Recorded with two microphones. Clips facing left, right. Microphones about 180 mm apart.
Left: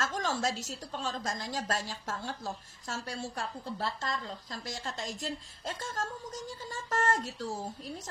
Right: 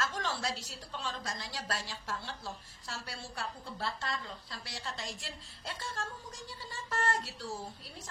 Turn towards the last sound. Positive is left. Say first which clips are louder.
# left 5 dB
turn(degrees=45)  # may be behind; listen again after turning